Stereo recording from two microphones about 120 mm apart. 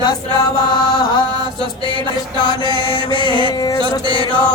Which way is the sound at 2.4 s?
40° right (ahead or behind).